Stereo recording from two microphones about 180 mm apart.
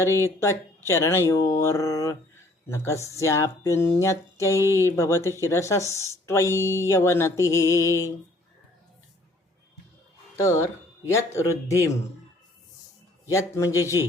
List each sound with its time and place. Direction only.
0.0 s speech: 15° left (ahead or behind)
10.3 s speech: 15° left (ahead or behind)
13.2 s speech: 15° left (ahead or behind)